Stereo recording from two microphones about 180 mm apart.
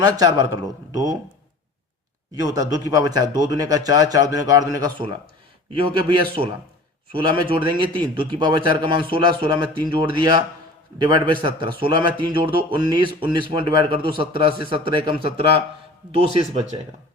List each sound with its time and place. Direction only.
0.0 s a man's voice: 20° right (ahead or behind)
2.3 s a man's voice: 20° right (ahead or behind)